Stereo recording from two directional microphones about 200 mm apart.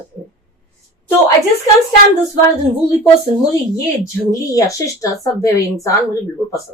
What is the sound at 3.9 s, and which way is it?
A woman's voice, 15° left (ahead or behind).